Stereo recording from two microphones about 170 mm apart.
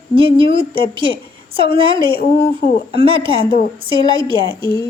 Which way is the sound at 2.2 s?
60° left (ahead or behind).